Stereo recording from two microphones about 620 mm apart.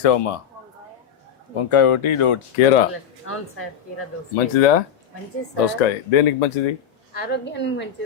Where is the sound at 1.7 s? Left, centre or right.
Left.